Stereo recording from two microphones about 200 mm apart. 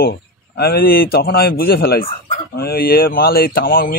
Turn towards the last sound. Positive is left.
turn(degrees=45)  # may be behind; listen again after turning